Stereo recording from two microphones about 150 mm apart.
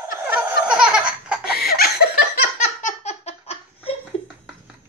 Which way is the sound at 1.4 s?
90° left.